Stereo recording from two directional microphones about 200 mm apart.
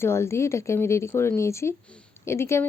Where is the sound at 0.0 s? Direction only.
10° left (ahead or behind).